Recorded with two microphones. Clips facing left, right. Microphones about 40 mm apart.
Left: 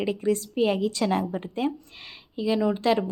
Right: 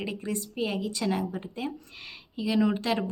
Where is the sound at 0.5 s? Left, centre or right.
Left.